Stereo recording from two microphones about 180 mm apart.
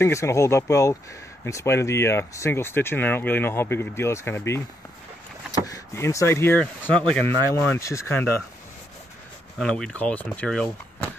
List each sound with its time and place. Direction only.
0.0 s speech: 15° left (ahead or behind)
5.7 s speech: 15° left (ahead or behind)
9.6 s speech: 5° left (ahead or behind)